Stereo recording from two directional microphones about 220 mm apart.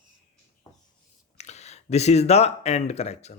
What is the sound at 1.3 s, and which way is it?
Speech, 30° left (ahead or behind).